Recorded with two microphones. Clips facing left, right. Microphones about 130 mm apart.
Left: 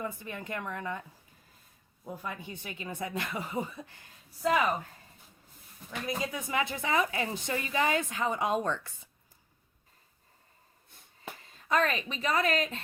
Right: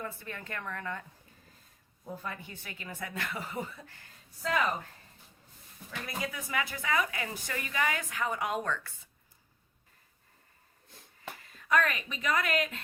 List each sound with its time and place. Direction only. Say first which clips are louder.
0.0 s speech: left 3 dB; 15° left (ahead or behind)
2.0 s speech: left 1 dB; 15° left (ahead or behind)
5.9 s a woman's voice: left 4 dB; 20° left (ahead or behind)
11.4 s a woman's voice: even; 25° left (ahead or behind)